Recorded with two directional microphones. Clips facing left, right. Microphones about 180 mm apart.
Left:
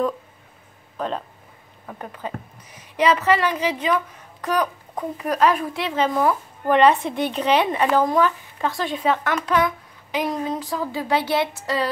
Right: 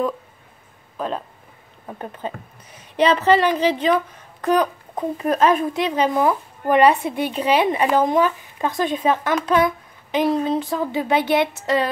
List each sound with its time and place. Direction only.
0.9 s speech: 5° right (ahead or behind)
1.9 s a woman's voice: 25° right (ahead or behind)